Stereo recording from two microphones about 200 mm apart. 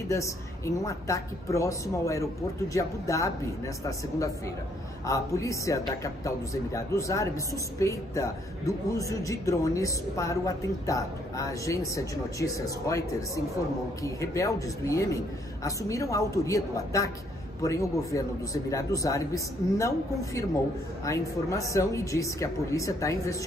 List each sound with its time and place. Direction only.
0.1 s speech: 15° left (ahead or behind)
14.0 s speech: 15° left (ahead or behind)
21.0 s speech: 15° left (ahead or behind)